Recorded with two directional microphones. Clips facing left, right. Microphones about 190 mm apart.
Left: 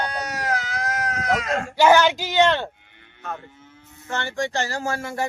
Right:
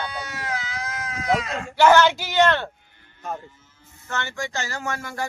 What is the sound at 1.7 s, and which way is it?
Speech, 15° left (ahead or behind).